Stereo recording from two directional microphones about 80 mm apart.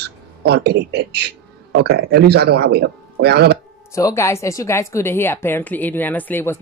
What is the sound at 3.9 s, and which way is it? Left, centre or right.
A woman's voice, left.